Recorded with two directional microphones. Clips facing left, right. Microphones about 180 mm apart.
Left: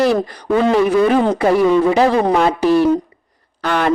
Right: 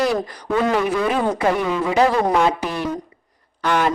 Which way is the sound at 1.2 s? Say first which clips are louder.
Left 6 dB; 30° left (ahead or behind).